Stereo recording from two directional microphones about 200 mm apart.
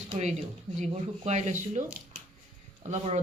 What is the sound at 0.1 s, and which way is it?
Speech, 35° right (ahead or behind).